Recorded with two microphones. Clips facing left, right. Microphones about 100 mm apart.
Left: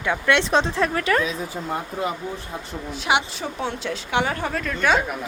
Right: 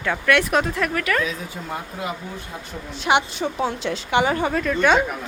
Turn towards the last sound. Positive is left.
turn(degrees=0)  # may be behind; listen again after turning